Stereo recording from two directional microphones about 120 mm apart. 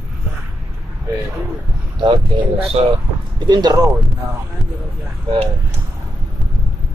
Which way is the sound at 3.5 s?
35° right (ahead or behind).